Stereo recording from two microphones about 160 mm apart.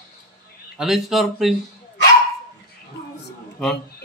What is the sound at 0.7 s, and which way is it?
Speech, centre (ahead or behind).